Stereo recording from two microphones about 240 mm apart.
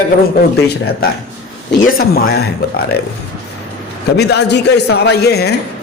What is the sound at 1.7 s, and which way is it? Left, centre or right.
Speech, left.